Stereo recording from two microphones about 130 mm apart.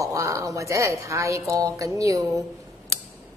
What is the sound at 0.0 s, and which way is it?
A woman's voice, 25° right (ahead or behind).